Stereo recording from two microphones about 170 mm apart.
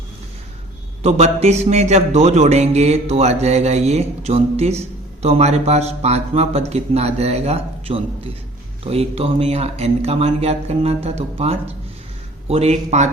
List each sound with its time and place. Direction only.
1.0 s music: 40° right (ahead or behind)